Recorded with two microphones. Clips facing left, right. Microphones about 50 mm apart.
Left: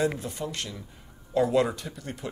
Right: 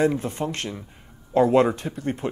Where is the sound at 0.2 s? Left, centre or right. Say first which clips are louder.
Right 6 dB; right.